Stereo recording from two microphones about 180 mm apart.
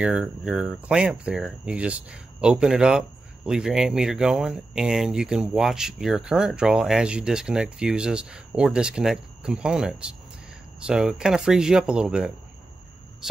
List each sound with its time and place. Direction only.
0.0 s speech: 5° right (ahead or behind)